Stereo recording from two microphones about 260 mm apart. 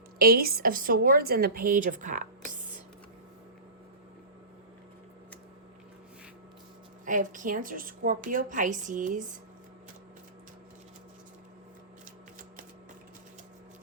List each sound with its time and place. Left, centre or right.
0.2 s a woman's voice: right
7.0 s a woman's voice: right